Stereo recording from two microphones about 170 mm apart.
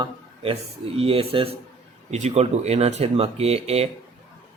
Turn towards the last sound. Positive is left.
turn(degrees=-35)  # may be behind; listen again after turning